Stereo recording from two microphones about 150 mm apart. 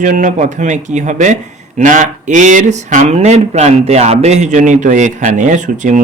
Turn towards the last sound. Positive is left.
turn(degrees=-55)  # may be behind; listen again after turning